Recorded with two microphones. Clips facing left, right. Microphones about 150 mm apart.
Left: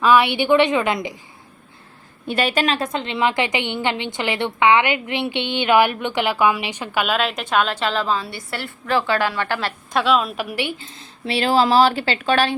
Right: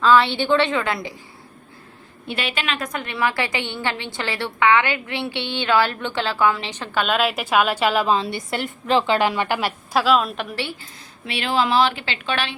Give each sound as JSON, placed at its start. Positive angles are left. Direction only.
{"t": 0.0, "sound": "a woman's voice", "side_deg": 15}
{"t": 2.2, "sound": "a woman's voice", "side_deg": 45}
{"t": 10.0, "sound": "a woman's voice", "side_deg": 0}